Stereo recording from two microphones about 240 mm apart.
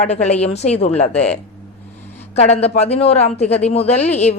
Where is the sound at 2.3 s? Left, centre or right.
Left.